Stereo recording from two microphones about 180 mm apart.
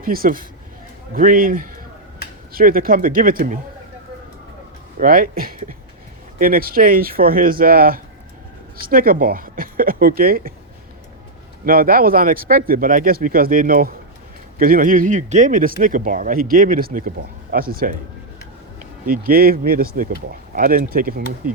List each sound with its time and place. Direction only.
0.0 s speech: 55° right (ahead or behind)
4.9 s speech: 50° right (ahead or behind)
11.6 s speech: 55° right (ahead or behind)